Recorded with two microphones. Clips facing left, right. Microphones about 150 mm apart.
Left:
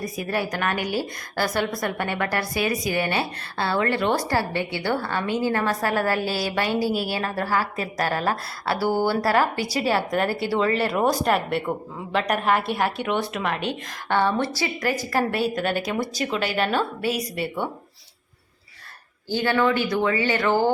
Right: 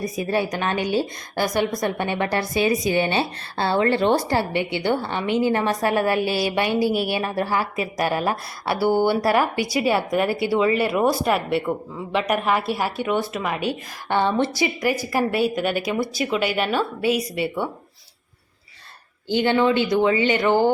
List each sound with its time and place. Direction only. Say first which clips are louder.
0.0 s a woman's voice: right 4 dB; 25° right (ahead or behind); by 14.2 s 5° right (ahead or behind)
14.2 s speech: right 3 dB; 20° right (ahead or behind)
17.0 s a woman's voice: right 4 dB; 40° left (ahead or behind)
19.3 s a woman's voice: right 3 dB; 20° right (ahead or behind)